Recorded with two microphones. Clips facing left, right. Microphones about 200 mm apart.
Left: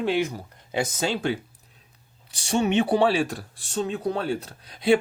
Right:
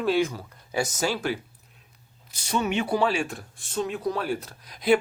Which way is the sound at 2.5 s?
30° left (ahead or behind).